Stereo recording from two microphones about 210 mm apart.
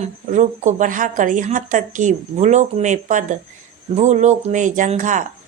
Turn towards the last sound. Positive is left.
turn(degrees=-35)  # may be behind; listen again after turning